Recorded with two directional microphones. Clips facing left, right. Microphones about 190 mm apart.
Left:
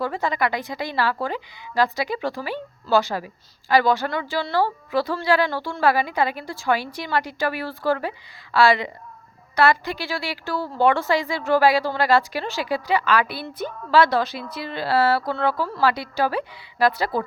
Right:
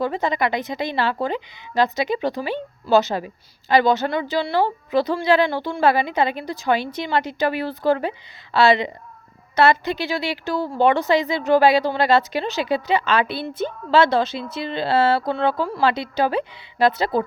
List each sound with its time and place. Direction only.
0.0 s a woman's voice: 20° right (ahead or behind)